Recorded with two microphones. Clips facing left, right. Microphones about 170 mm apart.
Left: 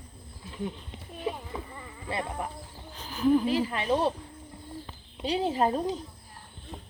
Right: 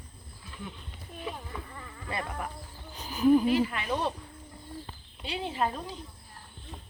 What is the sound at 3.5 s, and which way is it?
Speech, 30° left (ahead or behind).